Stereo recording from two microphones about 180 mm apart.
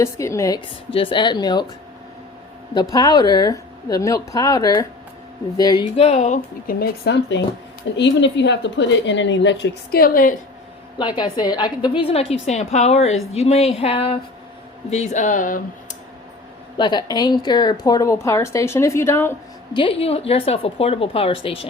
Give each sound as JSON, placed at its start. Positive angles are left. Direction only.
{"t": 0.0, "sound": "a woman's voice", "side_deg": 15}
{"t": 0.9, "sound": "speech", "side_deg": 30}
{"t": 2.7, "sound": "speech", "side_deg": 20}
{"t": 6.0, "sound": "a woman's voice", "side_deg": 35}
{"t": 6.7, "sound": "a woman's voice", "side_deg": 60}
{"t": 10.9, "sound": "a woman's voice", "side_deg": 25}
{"t": 16.7, "sound": "a woman's voice", "side_deg": 25}
{"t": 19.7, "sound": "a woman's voice", "side_deg": 30}